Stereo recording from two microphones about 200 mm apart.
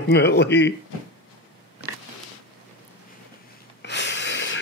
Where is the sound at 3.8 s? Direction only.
60° left (ahead or behind).